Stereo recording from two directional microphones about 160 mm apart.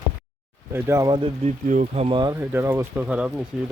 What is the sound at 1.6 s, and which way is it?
Speech, 50° right (ahead or behind).